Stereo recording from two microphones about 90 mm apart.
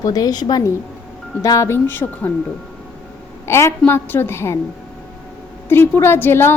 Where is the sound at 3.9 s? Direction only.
25° left (ahead or behind).